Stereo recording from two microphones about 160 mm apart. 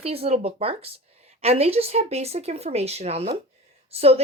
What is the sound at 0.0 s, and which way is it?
Speech, 40° right (ahead or behind).